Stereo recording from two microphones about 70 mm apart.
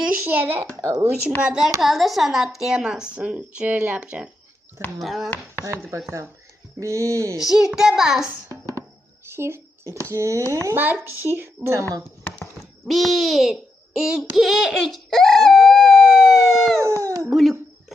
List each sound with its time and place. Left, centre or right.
0.0 s speech: right
0.8 s speech: right
1.5 s speech: centre
4.9 s speech: centre
6.7 s speech: right
7.3 s speech: centre
9.3 s speech: right
10.8 s speech: right
11.7 s speech: right
12.8 s a child's voice: centre
14.3 s dog: centre